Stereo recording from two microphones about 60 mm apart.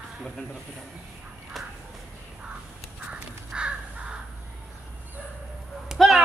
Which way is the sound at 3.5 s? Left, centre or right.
Centre.